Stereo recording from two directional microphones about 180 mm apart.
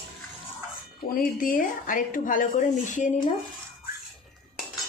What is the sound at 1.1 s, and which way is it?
Speech, 50° left (ahead or behind).